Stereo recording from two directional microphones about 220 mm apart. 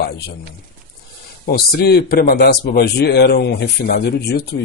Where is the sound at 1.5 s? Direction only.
45° left (ahead or behind).